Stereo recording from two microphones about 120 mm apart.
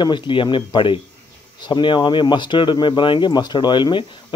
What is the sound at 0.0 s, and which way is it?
Speech, 45° left (ahead or behind).